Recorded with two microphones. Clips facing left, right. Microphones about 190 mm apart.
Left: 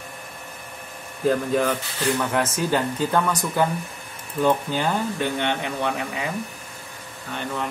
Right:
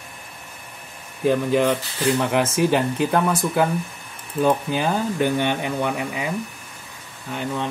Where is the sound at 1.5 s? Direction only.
25° right (ahead or behind).